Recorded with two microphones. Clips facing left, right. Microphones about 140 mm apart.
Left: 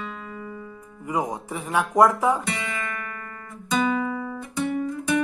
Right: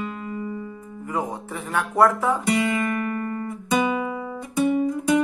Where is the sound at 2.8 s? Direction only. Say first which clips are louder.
Right 9 dB; 30° right (ahead or behind).